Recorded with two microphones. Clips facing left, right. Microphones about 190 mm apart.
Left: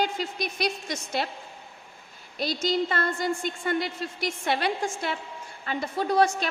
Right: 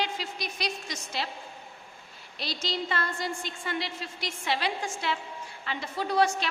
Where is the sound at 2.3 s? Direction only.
50° left (ahead or behind).